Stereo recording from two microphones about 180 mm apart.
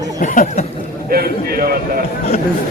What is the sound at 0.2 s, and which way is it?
Speech, 45° left (ahead or behind).